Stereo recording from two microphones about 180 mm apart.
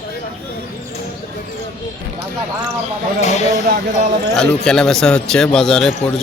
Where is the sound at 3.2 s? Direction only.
40° left (ahead or behind).